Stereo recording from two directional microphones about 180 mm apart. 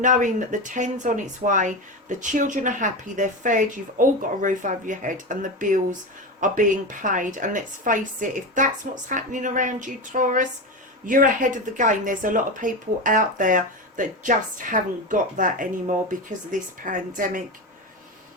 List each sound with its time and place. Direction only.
0.0 s speech: 45° right (ahead or behind)